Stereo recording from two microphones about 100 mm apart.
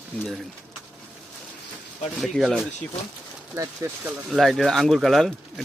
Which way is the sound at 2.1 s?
Centre (ahead or behind).